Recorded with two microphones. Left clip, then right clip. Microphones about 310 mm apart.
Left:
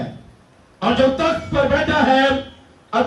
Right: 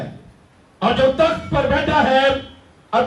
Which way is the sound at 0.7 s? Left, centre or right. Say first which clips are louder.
Right 1 dB; right.